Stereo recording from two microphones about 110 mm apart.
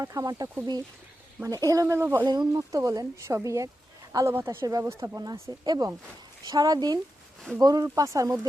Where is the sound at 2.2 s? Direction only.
35° right (ahead or behind).